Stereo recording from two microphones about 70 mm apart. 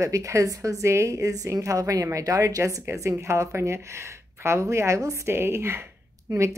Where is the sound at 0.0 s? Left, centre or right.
Right.